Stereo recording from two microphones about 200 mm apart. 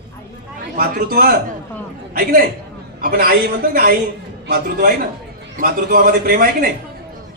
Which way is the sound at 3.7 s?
45° right (ahead or behind).